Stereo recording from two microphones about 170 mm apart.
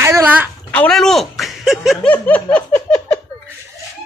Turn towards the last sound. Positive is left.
turn(degrees=10)  # may be behind; listen again after turning